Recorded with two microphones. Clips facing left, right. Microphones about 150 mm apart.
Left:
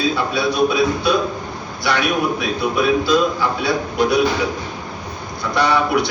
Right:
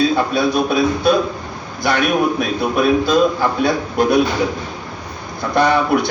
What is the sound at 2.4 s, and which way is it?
A man's voice, 50° right (ahead or behind).